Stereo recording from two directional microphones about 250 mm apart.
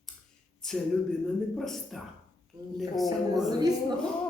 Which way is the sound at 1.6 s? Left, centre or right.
Centre.